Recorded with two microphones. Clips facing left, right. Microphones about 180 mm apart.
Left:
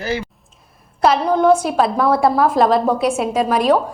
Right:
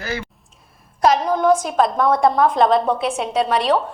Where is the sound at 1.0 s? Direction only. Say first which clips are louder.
Left 2 dB; 5° left (ahead or behind).